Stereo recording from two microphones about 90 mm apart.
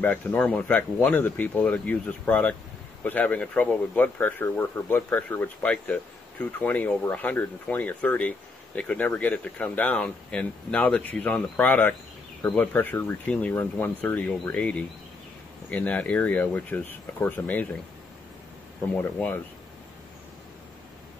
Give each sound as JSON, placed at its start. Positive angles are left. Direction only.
{"t": 0.0, "sound": "speech", "side_deg": 20}
{"t": 19.1, "sound": "speech", "side_deg": 20}